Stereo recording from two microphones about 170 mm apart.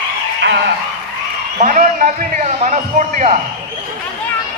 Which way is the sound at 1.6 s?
50° right (ahead or behind).